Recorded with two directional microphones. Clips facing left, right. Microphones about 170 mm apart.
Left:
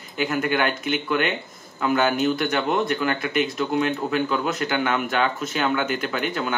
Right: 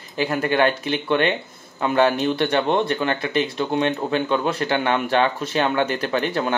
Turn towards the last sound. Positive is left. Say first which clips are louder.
# right 4 dB
turn(degrees=-35)  # may be behind; listen again after turning